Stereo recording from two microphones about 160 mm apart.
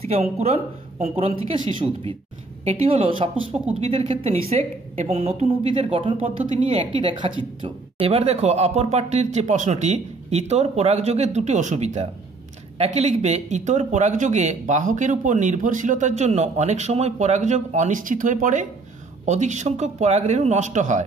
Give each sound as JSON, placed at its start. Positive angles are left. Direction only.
{"t": 0.0, "sound": "a woman's voice", "side_deg": -40}